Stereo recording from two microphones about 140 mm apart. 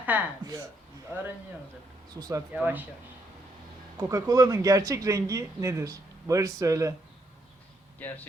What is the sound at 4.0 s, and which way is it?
A man's voice, 25° right (ahead or behind).